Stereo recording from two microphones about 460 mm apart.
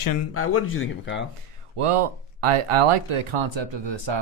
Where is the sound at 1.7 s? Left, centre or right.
Right.